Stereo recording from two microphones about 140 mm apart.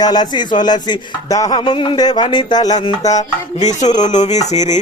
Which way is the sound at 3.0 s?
55° left (ahead or behind).